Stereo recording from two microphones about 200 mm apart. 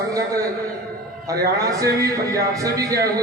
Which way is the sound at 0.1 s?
15° right (ahead or behind).